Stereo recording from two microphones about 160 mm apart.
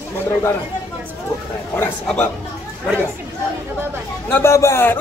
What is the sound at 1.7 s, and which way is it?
Speech, 10° left (ahead or behind).